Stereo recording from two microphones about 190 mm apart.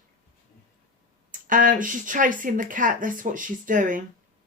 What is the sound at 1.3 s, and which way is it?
Speech, 45° right (ahead or behind).